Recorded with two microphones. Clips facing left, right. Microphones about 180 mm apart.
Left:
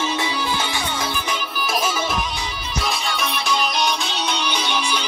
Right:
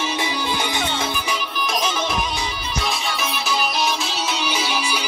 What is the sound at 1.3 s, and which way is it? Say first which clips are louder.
Music: even; 5° left (ahead or behind).